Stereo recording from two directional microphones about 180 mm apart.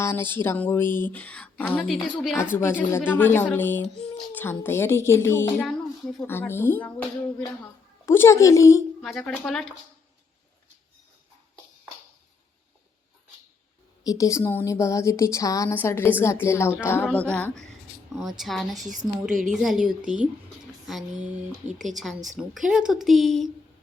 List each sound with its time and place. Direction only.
0.0 s a woman's voice: 10° left (ahead or behind)
2.3 s a woman's voice: 15° left (ahead or behind)
5.6 s a sound: centre (ahead or behind)
6.2 s a woman's voice: 15° left (ahead or behind)
9.0 s a woman's voice: centre (ahead or behind)
14.0 s a woman's voice: 20° left (ahead or behind); by 19.9 s 5° right (ahead or behind)
20.8 s a sound: centre (ahead or behind)
21.8 s a woman's voice: centre (ahead or behind)